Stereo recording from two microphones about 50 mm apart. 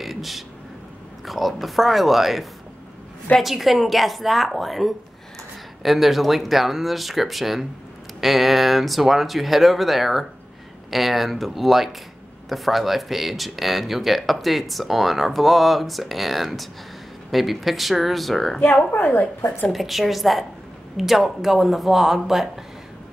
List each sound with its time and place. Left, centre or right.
0.0 s a sound: centre
1.2 s speech: centre
18.9 s a woman's voice: left
19.7 s speech: centre